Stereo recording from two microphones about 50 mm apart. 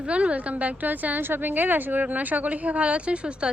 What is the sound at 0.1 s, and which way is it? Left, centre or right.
A woman's voice, right.